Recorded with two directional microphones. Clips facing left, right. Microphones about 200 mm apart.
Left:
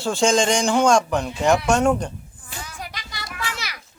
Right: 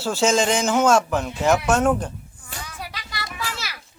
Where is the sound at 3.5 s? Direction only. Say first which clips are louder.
Even; 15° left (ahead or behind).